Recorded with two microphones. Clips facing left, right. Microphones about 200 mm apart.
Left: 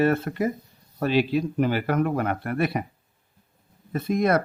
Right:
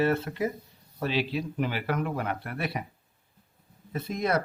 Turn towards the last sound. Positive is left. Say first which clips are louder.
# left 6 dB
turn(degrees=55)  # may be behind; listen again after turning